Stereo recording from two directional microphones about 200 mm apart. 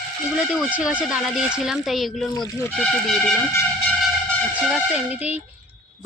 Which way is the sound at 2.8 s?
Centre (ahead or behind).